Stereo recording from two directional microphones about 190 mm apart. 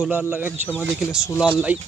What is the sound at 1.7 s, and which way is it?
Speech, 10° right (ahead or behind).